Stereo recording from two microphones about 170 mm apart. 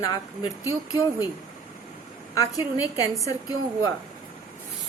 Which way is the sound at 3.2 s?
20° left (ahead or behind).